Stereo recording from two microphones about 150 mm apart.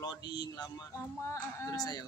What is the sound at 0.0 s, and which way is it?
A woman's voice, 25° left (ahead or behind).